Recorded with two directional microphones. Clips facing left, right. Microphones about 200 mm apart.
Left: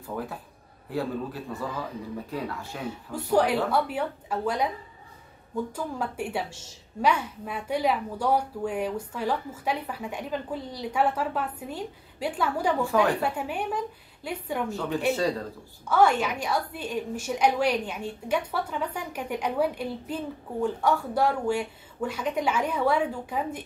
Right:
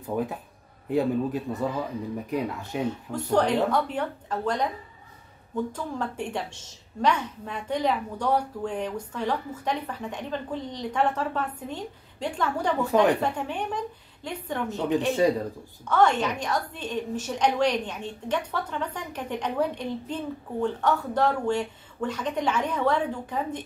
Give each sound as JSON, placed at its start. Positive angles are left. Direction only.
{"t": 0.0, "sound": "a man's voice", "side_deg": -20}
{"t": 3.1, "sound": "a woman's voice", "side_deg": 10}
{"t": 5.7, "sound": "a woman's voice", "side_deg": 10}
{"t": 14.7, "sound": "a man's voice", "side_deg": -20}
{"t": 15.9, "sound": "a woman's voice", "side_deg": 10}